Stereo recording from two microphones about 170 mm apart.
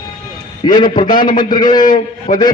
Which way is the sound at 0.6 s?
25° left (ahead or behind).